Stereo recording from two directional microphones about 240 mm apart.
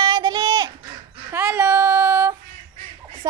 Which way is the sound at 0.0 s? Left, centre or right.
Centre.